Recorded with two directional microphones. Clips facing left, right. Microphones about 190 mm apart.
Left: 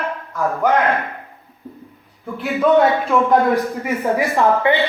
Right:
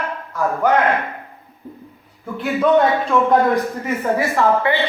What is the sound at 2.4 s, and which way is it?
A man's voice, centre (ahead or behind).